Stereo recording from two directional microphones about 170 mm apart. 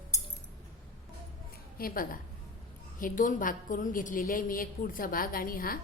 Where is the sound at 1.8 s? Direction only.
55° left (ahead or behind).